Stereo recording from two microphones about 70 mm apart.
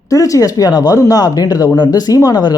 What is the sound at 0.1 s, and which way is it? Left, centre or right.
Speech, left.